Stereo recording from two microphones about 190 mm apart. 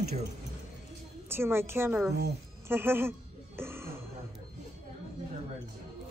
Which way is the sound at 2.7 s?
10° right (ahead or behind).